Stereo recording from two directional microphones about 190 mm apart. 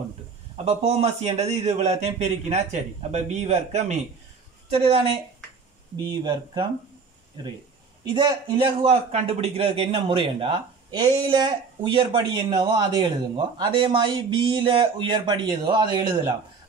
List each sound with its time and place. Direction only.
0.7 s a man's voice: 35° right (ahead or behind)
6.0 s a man's voice: 25° right (ahead or behind)
8.1 s a man's voice: 25° right (ahead or behind)